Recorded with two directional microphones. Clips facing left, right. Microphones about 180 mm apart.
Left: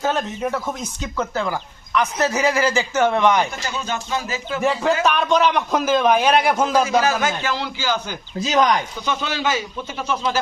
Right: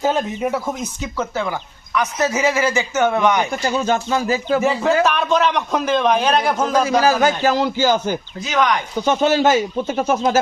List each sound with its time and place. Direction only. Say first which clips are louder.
0.0 s a man's voice: right 3 dB; 10° right (ahead or behind)
3.5 s speech: right 8 dB; 40° right (ahead or behind)
4.6 s a man's voice: left 2 dB; centre (ahead or behind)
7.0 s speech: right 5 dB; 35° right (ahead or behind)
8.4 s speech: left 1 dB; 35° left (ahead or behind)
9.0 s speech: right 10 dB; 45° right (ahead or behind)